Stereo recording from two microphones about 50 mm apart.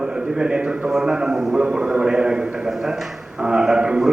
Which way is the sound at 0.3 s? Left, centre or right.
Centre.